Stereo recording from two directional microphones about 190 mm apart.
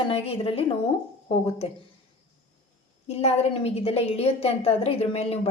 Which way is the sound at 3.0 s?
35° left (ahead or behind).